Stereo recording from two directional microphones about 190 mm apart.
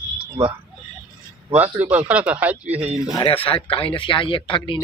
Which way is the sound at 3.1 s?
30° left (ahead or behind).